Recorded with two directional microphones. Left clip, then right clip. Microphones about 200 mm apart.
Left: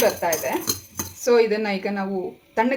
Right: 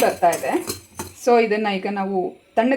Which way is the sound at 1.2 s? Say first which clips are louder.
Right 2 dB; 30° right (ahead or behind).